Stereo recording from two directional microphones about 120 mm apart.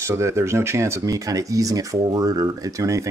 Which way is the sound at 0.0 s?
25° right (ahead or behind).